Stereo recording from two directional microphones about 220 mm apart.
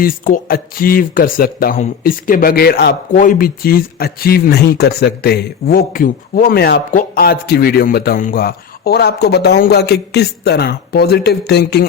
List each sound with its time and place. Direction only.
0.0 s speech: 40° left (ahead or behind)